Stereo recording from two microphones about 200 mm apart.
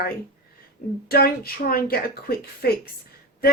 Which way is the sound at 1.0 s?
50° left (ahead or behind).